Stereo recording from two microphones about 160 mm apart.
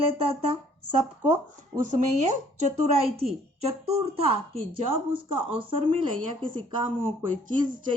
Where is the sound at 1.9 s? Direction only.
45° right (ahead or behind).